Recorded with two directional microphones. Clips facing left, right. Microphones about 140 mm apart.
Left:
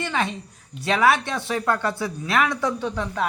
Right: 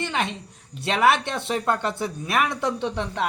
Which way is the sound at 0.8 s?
25° right (ahead or behind).